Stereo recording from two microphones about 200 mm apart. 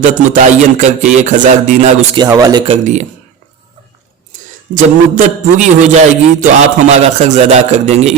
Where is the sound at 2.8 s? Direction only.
35° right (ahead or behind).